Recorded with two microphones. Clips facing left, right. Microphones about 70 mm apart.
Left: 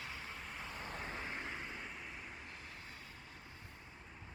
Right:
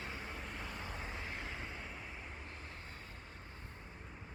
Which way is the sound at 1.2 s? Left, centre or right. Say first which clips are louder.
Left 1 dB; left.